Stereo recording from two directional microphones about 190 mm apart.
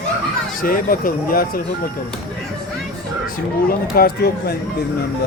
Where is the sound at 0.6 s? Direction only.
45° left (ahead or behind).